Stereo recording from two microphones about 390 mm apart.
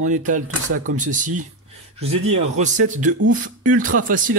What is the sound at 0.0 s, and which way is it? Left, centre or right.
Speech, centre.